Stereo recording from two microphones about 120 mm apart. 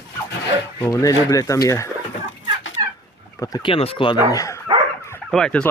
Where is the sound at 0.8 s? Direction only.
30° left (ahead or behind).